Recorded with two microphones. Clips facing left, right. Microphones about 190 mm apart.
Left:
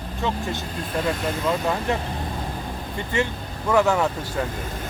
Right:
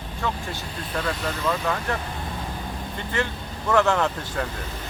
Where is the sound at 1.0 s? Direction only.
15° left (ahead or behind).